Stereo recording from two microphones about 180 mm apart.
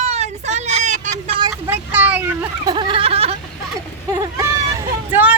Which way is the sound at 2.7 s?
25° right (ahead or behind).